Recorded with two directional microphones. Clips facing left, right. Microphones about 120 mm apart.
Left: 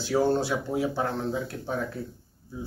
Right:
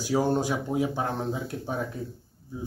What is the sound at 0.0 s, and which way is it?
Speech, 15° right (ahead or behind).